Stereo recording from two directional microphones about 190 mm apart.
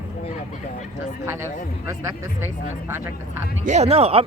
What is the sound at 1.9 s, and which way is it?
Speech, 15° right (ahead or behind).